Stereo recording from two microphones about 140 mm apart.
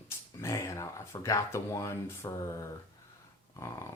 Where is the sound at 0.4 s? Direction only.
20° left (ahead or behind).